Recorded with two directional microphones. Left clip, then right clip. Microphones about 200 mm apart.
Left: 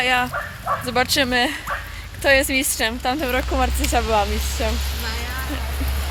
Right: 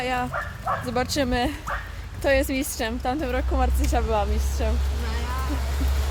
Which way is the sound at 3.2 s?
30° left (ahead or behind).